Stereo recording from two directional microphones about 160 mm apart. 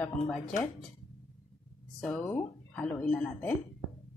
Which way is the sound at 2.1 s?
15° left (ahead or behind).